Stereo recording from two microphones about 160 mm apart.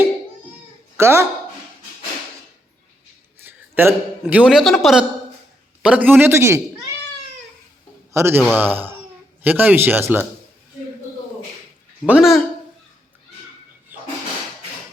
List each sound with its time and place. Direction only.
0.9 s speech: 15° right (ahead or behind)
3.4 s a man's voice: 10° right (ahead or behind)
8.1 s a man's voice: 15° right (ahead or behind)
12.0 s speech: 5° right (ahead or behind)
13.9 s a sound: 10° right (ahead or behind)